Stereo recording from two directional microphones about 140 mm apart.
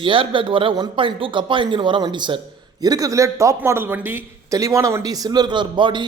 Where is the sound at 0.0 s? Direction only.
40° right (ahead or behind).